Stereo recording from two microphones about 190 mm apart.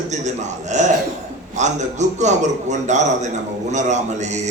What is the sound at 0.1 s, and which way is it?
A man's voice, 40° right (ahead or behind).